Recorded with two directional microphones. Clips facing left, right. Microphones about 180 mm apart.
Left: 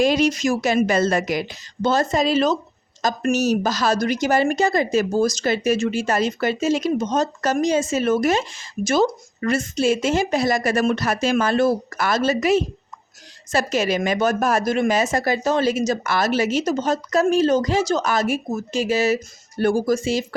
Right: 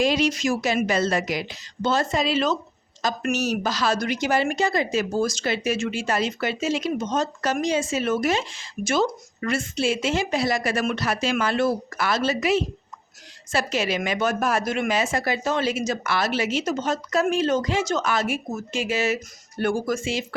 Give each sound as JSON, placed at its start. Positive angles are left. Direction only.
{"t": 0.0, "sound": "a woman's voice", "side_deg": 45}